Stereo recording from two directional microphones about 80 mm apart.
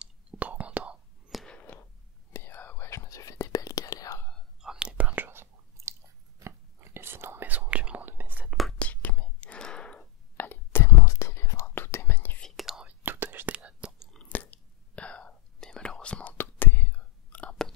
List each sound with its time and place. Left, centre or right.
0.0 s whispering: centre
1.3 s a sound: centre
1.6 s a sound: left
2.3 s whispering: left
2.9 s whispering: left
4.6 s whispering: centre
8.5 s whispering: centre
8.7 s whispering: centre
10.3 s whispering: left
12.4 s whispering: centre
12.8 s whispering: right
14.1 s whispering: centre
16.3 s whispering: left